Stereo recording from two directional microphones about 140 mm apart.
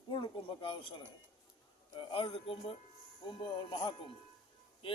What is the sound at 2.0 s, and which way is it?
A man's voice, 40° left (ahead or behind).